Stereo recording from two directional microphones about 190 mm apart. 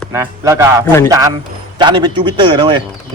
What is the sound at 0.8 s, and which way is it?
Speech, 15° left (ahead or behind).